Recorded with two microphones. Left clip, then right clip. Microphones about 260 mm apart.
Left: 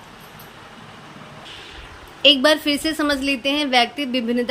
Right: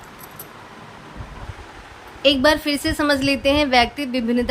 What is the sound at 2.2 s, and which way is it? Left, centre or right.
A woman's voice, centre.